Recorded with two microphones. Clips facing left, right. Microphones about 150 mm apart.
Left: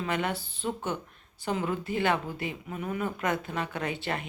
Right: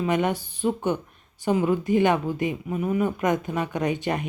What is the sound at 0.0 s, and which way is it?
Speech, 15° right (ahead or behind).